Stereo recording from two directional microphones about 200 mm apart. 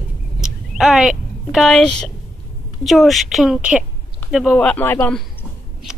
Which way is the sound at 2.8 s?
Centre (ahead or behind).